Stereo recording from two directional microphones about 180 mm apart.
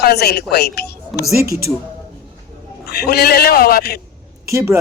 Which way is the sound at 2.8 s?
60° left (ahead or behind).